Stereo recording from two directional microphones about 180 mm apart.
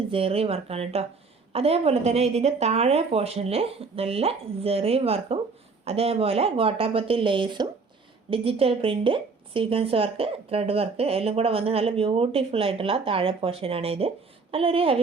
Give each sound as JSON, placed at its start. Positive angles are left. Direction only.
{"t": 0.1, "sound": "a woman's voice", "side_deg": -30}